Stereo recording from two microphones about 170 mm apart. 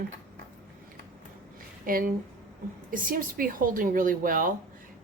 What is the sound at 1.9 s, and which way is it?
Speech, 55° right (ahead or behind).